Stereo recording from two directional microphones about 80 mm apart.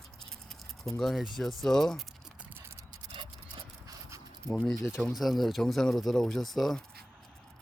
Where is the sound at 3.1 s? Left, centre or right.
Right.